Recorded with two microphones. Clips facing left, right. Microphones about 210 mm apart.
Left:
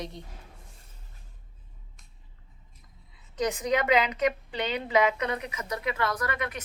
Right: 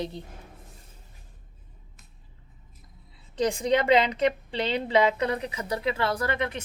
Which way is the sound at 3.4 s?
30° right (ahead or behind).